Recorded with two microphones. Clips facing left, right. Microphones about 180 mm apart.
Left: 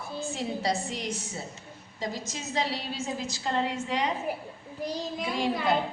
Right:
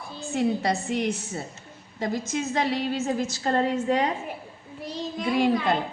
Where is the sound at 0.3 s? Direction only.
60° right (ahead or behind).